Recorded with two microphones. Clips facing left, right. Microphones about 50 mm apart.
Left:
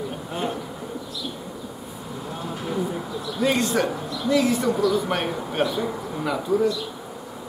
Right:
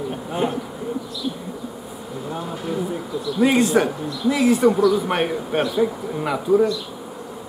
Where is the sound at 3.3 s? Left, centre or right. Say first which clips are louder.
Right 5 dB; centre.